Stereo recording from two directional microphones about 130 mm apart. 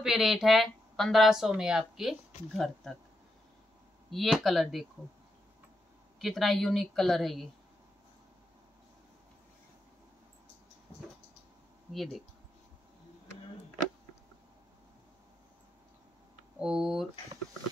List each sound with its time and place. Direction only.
0.0 s speech: centre (ahead or behind)
4.1 s speech: centre (ahead or behind)
6.1 s speech: centre (ahead or behind)
11.9 s speech: centre (ahead or behind)
16.5 s speech: 5° right (ahead or behind)